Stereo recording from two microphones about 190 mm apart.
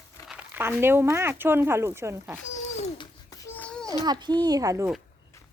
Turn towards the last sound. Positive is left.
turn(degrees=-20)  # may be behind; listen again after turning